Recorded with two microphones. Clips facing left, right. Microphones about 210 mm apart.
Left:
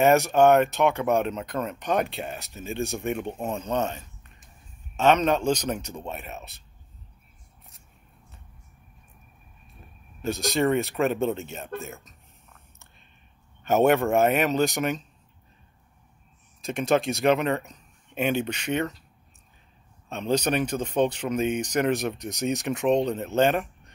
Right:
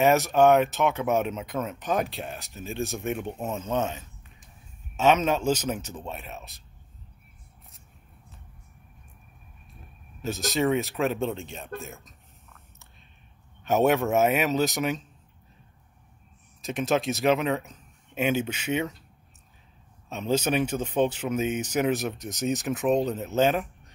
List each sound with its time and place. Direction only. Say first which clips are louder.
0.0 s speech: left 1 dB; centre (ahead or behind)
10.2 s speech: left 2 dB; 5° right (ahead or behind)
13.7 s speech: left 2 dB; centre (ahead or behind)
16.6 s speech: left 2 dB; centre (ahead or behind)
20.1 s speech: left 1 dB; 5° right (ahead or behind)